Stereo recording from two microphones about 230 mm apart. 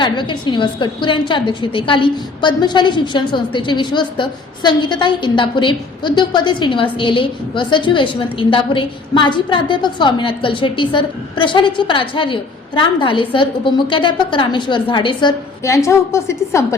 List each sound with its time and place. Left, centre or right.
0.0 s a woman's voice: centre